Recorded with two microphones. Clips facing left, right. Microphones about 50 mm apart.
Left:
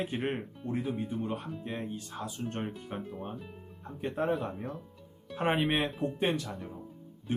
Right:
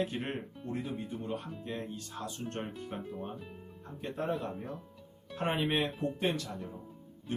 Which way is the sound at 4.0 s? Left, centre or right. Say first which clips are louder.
Left 4 dB; centre.